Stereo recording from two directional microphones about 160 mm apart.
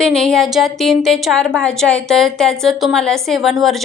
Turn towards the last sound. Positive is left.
turn(degrees=0)  # may be behind; listen again after turning